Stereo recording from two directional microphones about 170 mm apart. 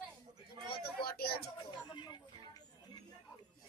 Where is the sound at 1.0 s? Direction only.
65° left (ahead or behind).